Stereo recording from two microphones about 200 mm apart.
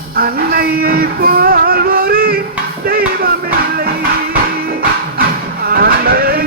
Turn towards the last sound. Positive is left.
turn(degrees=-50)  # may be behind; listen again after turning